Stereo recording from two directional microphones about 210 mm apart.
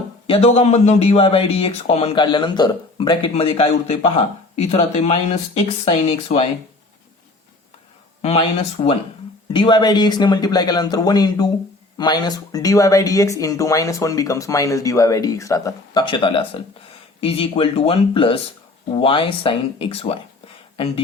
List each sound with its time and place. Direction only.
0.3 s speech: 30° left (ahead or behind)
8.2 s speech: 30° left (ahead or behind)